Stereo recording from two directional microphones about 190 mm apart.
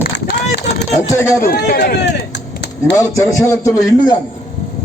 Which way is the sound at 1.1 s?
15° left (ahead or behind).